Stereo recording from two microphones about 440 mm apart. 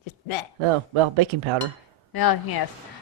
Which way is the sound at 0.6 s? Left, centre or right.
Right.